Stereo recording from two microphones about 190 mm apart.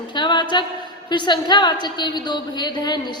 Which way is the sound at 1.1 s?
25° left (ahead or behind).